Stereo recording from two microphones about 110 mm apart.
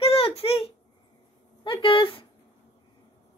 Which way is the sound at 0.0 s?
60° left (ahead or behind).